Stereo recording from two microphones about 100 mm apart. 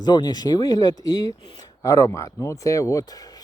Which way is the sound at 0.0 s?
45° left (ahead or behind).